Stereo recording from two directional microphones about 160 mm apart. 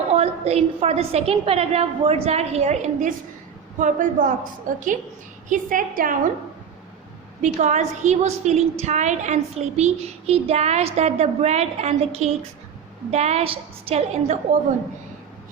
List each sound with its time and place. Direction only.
0.1 s a woman's voice: 40° right (ahead or behind); by 6.1 s 60° right (ahead or behind)
7.4 s a child's voice: 45° right (ahead or behind)